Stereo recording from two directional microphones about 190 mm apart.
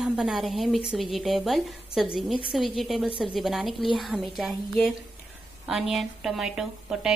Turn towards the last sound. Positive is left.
turn(degrees=0)  # may be behind; listen again after turning